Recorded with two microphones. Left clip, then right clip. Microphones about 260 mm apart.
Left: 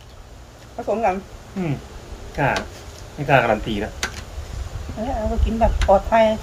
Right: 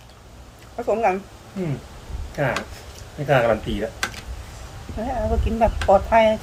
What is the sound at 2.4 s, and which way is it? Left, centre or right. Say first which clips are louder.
Speech: left 3 dB; centre.